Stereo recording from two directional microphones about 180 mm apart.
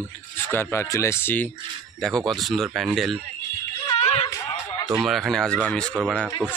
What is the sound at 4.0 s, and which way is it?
Music, 35° left (ahead or behind).